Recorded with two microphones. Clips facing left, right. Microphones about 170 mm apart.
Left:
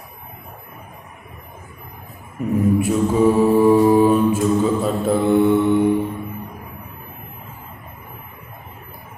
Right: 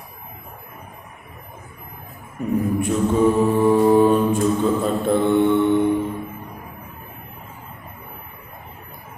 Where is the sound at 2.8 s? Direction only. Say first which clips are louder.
Right 1 dB; 5° left (ahead or behind).